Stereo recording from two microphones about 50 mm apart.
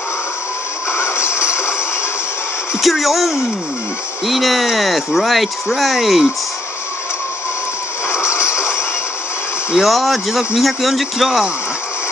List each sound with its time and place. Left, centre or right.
0.9 s music: left
2.8 s speech: centre
8.1 s a sound: left
9.8 s speech: centre